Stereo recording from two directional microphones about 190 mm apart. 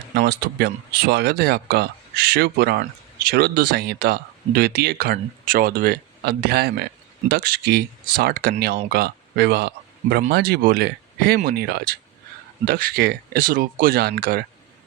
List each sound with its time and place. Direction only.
0.1 s speech: 60° right (ahead or behind)